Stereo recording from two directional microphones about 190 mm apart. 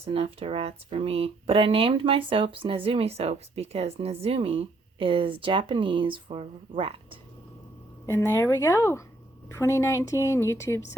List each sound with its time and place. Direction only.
0.0 s speech: 30° right (ahead or behind)
8.0 s a woman's voice: 15° left (ahead or behind)